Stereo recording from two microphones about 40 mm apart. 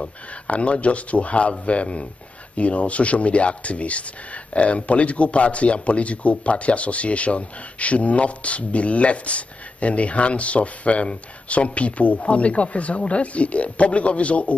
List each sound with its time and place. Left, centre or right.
0.0 s speech: left